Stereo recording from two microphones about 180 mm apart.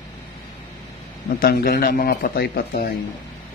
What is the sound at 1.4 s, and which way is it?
A man's voice, 55° left (ahead or behind).